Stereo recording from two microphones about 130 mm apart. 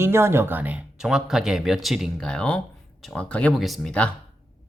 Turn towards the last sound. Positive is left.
turn(degrees=10)  # may be behind; listen again after turning